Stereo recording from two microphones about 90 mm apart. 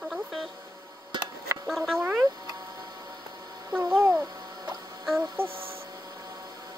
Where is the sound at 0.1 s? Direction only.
Centre (ahead or behind).